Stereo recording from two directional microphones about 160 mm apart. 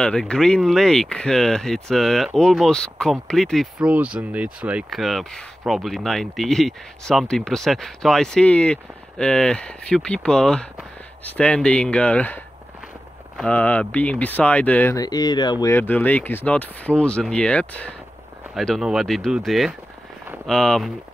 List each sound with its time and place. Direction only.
0.0 s speech: 5° left (ahead or behind)
3.9 s speech: 10° right (ahead or behind); by 12.4 s 10° left (ahead or behind)
13.4 s speech: 10° left (ahead or behind)
15.0 s speech: 25° left (ahead or behind)
15.7 s speech: 10° left (ahead or behind)